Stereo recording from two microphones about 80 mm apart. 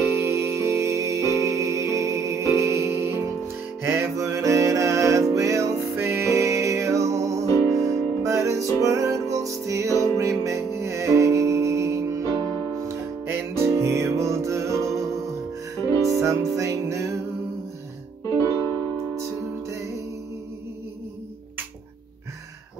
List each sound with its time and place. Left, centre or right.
0.1 s music: right
16.2 s music: right
18.4 s music: left